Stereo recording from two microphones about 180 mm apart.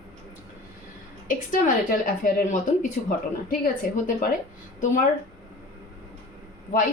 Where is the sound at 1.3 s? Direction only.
50° left (ahead or behind).